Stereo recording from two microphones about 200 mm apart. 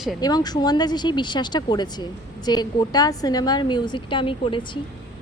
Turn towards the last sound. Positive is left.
turn(degrees=25)  # may be behind; listen again after turning